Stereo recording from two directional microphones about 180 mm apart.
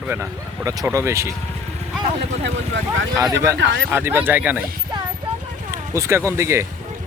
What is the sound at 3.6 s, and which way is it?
Speech, 90° right.